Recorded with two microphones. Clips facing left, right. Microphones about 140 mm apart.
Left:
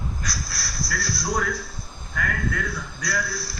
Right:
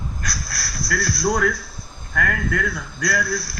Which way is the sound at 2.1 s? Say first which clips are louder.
Right 4 dB; 60° right (ahead or behind).